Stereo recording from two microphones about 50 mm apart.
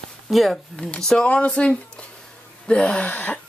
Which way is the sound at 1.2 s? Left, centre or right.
Left.